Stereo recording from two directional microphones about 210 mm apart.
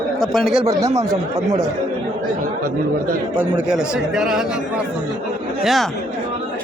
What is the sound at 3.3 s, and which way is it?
A man's voice, 5° right (ahead or behind).